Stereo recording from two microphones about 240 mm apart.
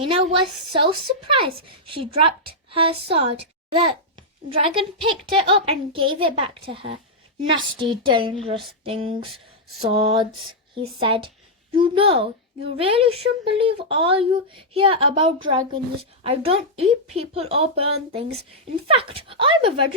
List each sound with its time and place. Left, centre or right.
0.0 s a woman's voice: right
8.8 s a sound: right
9.9 s speech: right